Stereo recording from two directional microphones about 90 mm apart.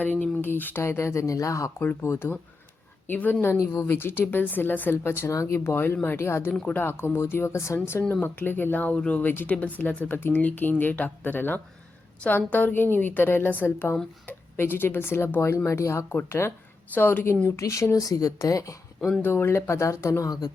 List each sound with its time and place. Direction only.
0.0 s speech: 20° left (ahead or behind)
6.5 s speech: 10° left (ahead or behind)
6.7 s speech: 25° left (ahead or behind)
8.2 s speech: 20° left (ahead or behind)
17.6 s speech: 35° left (ahead or behind)
19.2 s speech: 25° left (ahead or behind); by 20.5 s 40° left (ahead or behind)